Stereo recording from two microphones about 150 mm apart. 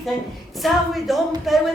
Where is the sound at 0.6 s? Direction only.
Centre (ahead or behind).